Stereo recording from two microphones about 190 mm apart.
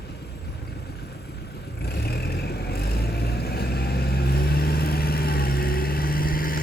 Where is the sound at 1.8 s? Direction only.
55° left (ahead or behind).